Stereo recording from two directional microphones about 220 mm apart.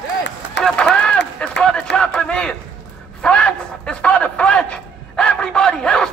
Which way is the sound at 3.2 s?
5° left (ahead or behind).